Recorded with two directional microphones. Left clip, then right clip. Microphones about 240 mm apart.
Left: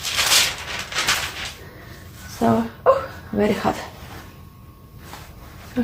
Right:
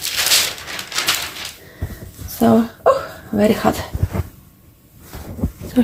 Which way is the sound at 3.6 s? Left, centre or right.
Right.